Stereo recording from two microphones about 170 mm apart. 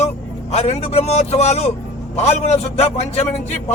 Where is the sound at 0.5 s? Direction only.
40° left (ahead or behind).